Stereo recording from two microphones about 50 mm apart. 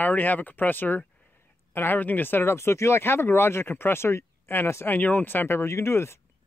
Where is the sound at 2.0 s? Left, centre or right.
Left.